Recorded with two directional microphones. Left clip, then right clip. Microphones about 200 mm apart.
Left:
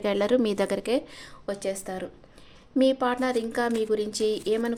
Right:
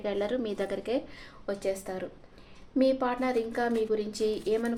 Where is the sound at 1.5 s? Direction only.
25° left (ahead or behind).